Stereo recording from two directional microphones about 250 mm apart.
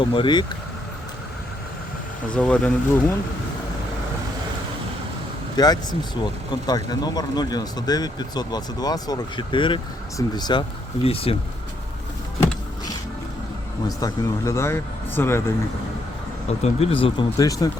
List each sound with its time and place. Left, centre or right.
0.0 s speech: centre
2.2 s speech: centre
5.5 s speech: centre
13.8 s speech: centre
16.6 s speech: left